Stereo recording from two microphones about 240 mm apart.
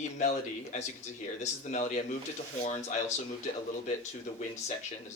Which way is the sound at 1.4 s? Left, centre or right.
Left.